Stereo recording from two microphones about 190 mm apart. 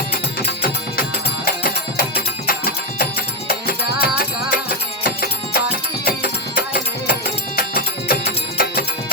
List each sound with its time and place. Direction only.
1.6 s music: 50° left (ahead or behind)
4.0 s music: 50° left (ahead or behind)